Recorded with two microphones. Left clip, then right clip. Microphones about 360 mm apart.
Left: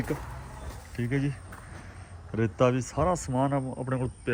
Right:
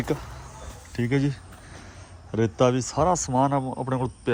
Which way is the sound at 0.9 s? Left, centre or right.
Centre.